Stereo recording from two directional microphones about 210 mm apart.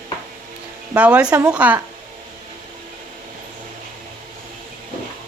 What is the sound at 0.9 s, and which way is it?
Speech, 5° right (ahead or behind).